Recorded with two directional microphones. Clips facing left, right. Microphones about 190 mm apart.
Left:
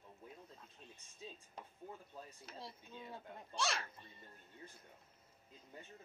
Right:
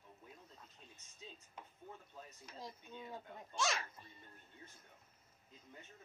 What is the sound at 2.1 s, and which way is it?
Speech, 30° left (ahead or behind).